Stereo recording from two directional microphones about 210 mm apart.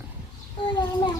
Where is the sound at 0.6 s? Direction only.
25° left (ahead or behind).